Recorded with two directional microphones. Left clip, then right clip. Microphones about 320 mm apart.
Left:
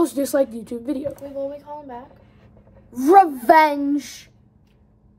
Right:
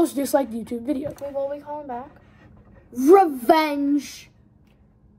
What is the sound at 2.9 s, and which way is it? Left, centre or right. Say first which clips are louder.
Speech: left 2 dB; centre.